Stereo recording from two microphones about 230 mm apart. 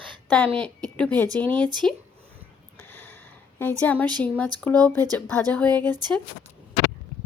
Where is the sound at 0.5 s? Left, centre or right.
Centre.